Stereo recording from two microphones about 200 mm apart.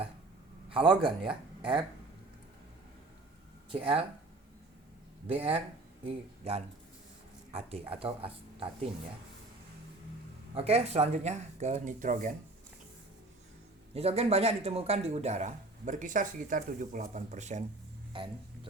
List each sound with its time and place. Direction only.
0.7 s speech: 25° right (ahead or behind)
5.3 s speech: 30° right (ahead or behind)
7.9 s speech: 30° right (ahead or behind)
10.5 s speech: 30° right (ahead or behind)
13.9 s speech: 30° right (ahead or behind)
18.1 s a sound: 25° right (ahead or behind)